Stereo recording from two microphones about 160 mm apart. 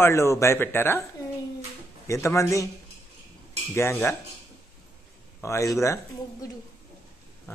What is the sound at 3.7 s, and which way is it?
Speech, 15° left (ahead or behind).